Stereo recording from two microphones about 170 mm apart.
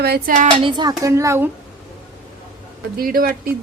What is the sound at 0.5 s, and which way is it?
Speech, 30° right (ahead or behind).